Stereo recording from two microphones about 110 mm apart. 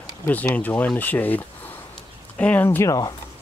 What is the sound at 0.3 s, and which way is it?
Speech, 15° left (ahead or behind).